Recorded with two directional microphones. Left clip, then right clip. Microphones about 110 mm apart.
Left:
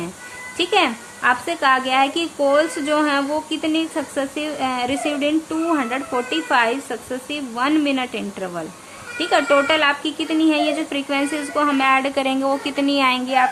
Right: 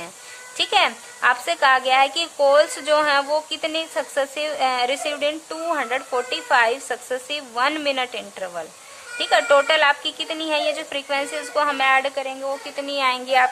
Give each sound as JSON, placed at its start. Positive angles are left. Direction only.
{"t": 0.5, "sound": "a woman's voice", "side_deg": -30}
{"t": 12.1, "sound": "speech", "side_deg": -5}
{"t": 12.7, "sound": "speech", "side_deg": -25}
{"t": 13.1, "sound": "a woman's voice", "side_deg": -45}